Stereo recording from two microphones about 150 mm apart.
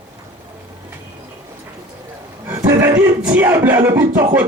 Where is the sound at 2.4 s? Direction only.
15° right (ahead or behind).